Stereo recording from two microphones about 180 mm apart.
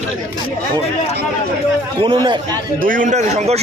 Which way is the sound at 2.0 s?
25° right (ahead or behind).